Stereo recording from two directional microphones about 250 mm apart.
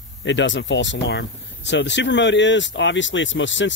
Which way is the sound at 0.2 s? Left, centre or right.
Left.